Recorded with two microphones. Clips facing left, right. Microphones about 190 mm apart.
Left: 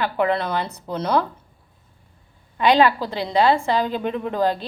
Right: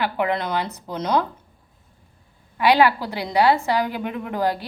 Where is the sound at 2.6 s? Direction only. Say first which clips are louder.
Left 1 dB; 10° right (ahead or behind).